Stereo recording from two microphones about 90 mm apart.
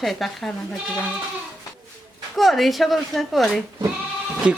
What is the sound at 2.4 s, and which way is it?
A woman's voice, centre (ahead or behind).